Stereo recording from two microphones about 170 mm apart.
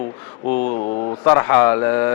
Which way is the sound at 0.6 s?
45° left (ahead or behind).